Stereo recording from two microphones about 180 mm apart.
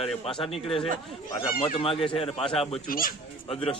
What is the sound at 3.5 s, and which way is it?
Speech, 30° left (ahead or behind).